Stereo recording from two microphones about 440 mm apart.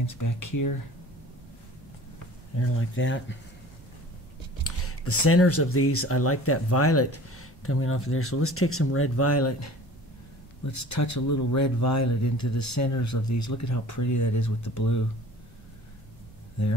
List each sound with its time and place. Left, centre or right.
0.0 s speech: left
2.5 s speech: left
4.6 s speech: left